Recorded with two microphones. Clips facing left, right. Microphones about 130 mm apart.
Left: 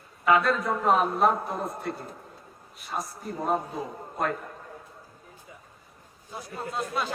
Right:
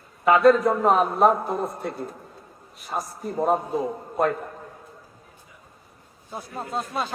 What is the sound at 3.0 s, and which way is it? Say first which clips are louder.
Speech: right 8 dB; centre (ahead or behind).